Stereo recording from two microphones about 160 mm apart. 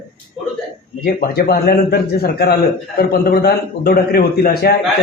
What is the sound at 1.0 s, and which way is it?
A man's voice, 75° left (ahead or behind).